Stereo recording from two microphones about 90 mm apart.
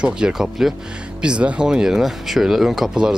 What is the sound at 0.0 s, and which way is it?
Speech, 10° right (ahead or behind).